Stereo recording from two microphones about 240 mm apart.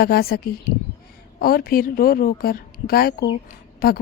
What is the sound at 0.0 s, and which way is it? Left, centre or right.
A woman's voice, left.